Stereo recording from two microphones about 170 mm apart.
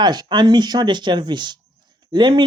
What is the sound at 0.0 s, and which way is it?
Speech, 25° right (ahead or behind).